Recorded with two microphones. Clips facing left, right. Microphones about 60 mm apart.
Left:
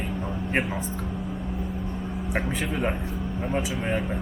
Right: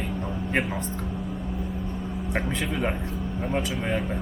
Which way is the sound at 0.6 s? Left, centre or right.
Centre.